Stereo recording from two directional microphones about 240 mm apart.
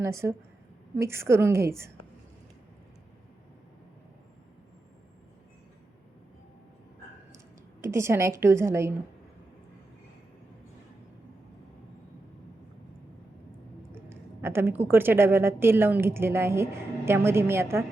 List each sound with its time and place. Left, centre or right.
0.0 s a woman's voice: centre
7.3 s a woman's voice: centre
13.9 s a woman's voice: centre